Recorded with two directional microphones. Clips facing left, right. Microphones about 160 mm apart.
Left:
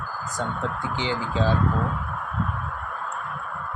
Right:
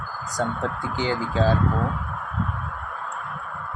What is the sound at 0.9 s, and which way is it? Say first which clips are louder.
Speech: right 3 dB; 40° right (ahead or behind).